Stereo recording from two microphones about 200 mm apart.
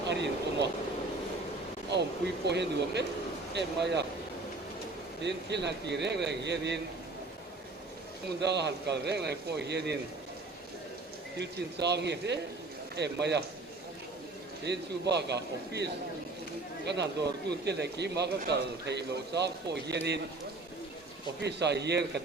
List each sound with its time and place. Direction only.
0.1 s a sound: 60° right (ahead or behind)
2.5 s a man's voice: 60° right (ahead or behind)
5.2 s a man's voice: 60° right (ahead or behind)
8.4 s a man's voice: 60° right (ahead or behind)
11.3 s a man's voice: 60° right (ahead or behind)
14.6 s a man's voice: 60° right (ahead or behind)
21.4 s a man's voice: 55° right (ahead or behind)